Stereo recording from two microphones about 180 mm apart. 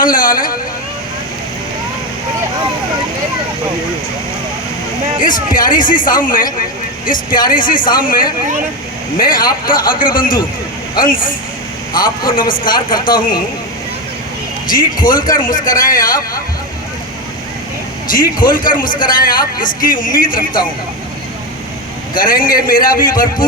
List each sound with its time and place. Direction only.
0.0 s a man's voice: 50° left (ahead or behind)
5.2 s a man's voice: 50° left (ahead or behind)
14.7 s a man's voice: 50° left (ahead or behind)
18.1 s a man's voice: 50° left (ahead or behind)
22.1 s a man's voice: 50° left (ahead or behind)